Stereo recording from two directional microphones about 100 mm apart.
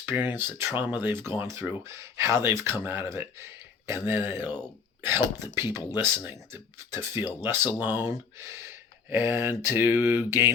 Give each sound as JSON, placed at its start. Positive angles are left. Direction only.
{"t": 0.0, "sound": "speech", "side_deg": -20}